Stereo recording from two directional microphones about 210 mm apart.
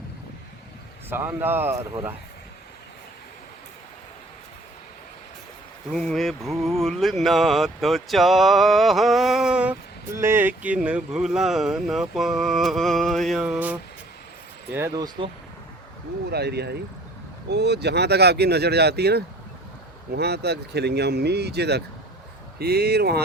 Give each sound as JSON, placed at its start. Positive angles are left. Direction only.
{"t": 1.1, "sound": "speech", "side_deg": -10}
{"t": 5.9, "sound": "speech", "side_deg": 0}
{"t": 16.3, "sound": "speech", "side_deg": -50}